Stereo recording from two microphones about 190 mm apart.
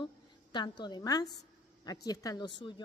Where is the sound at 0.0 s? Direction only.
25° left (ahead or behind).